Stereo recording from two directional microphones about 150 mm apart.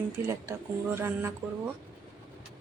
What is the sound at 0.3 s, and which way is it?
A woman's voice, 15° right (ahead or behind).